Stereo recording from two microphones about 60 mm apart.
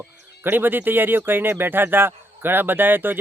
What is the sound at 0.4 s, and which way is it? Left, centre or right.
Speech, right.